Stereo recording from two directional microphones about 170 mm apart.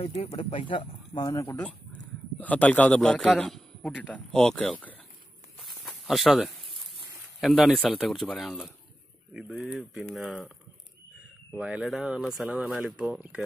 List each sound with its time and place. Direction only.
0.0 s a man's voice: 35° left (ahead or behind); by 4.9 s 5° left (ahead or behind)
5.6 s a sound: centre (ahead or behind)
7.3 s speech: centre (ahead or behind)
11.5 s speech: 5° right (ahead or behind)